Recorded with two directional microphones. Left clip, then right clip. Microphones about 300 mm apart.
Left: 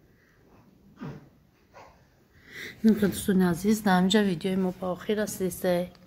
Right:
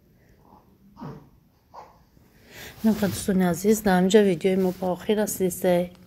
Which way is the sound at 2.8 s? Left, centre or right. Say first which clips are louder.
Even; centre.